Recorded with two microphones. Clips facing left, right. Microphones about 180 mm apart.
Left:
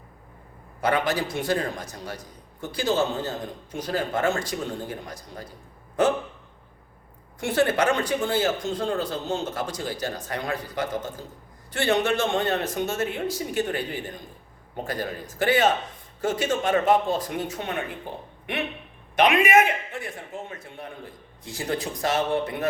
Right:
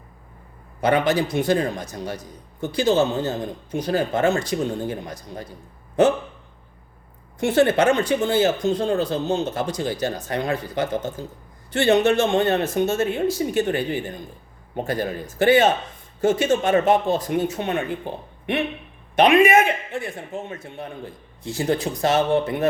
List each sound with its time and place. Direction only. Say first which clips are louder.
0.8 s a man's voice: right 5 dB; 20° right (ahead or behind)
7.3 s a man's voice: right 5 dB; 25° right (ahead or behind)